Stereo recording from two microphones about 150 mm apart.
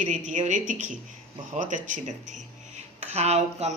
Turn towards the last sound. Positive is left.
turn(degrees=-45)  # may be behind; listen again after turning